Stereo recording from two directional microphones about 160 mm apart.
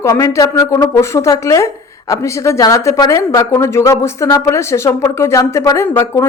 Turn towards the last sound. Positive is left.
turn(degrees=15)  # may be behind; listen again after turning